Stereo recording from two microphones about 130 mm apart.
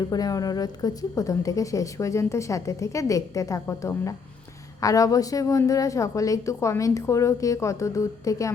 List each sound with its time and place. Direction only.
0.1 s a woman's voice: 30° left (ahead or behind)